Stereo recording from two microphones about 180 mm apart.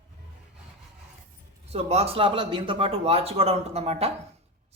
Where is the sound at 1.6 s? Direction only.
35° right (ahead or behind).